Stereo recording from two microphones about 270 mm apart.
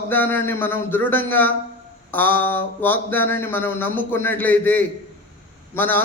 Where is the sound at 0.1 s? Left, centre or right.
Centre.